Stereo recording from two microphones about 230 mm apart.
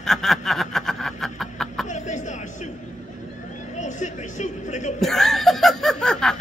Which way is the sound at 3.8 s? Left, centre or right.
Left.